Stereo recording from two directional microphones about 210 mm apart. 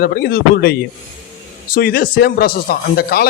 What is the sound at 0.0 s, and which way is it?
A man's voice, 45° left (ahead or behind).